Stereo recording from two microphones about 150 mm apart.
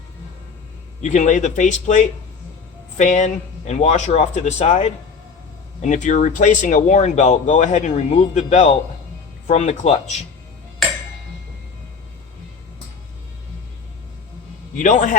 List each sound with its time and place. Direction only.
1.0 s speech: 55° left (ahead or behind)
14.8 s speech: 55° left (ahead or behind)